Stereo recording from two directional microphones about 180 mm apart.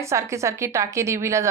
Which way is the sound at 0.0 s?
15° right (ahead or behind).